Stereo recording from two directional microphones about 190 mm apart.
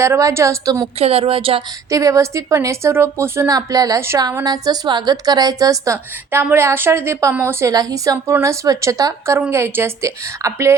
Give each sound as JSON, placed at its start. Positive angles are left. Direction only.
{"t": 0.0, "sound": "a woman's voice", "side_deg": -15}
{"t": 0.9, "sound": "speech", "side_deg": -30}
{"t": 1.9, "sound": "a woman's voice", "side_deg": -15}